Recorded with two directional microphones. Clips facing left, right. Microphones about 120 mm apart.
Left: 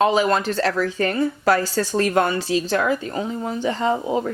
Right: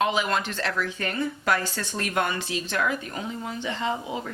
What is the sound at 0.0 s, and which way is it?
A woman's voice, 40° left (ahead or behind).